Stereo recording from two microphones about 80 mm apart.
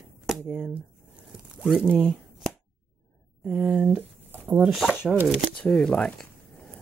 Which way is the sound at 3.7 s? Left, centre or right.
Right.